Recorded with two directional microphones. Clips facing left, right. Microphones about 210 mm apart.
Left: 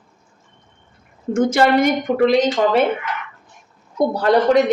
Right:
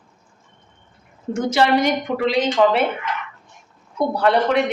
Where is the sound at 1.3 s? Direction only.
50° left (ahead or behind).